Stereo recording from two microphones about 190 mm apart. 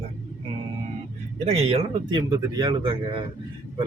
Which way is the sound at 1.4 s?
30° right (ahead or behind).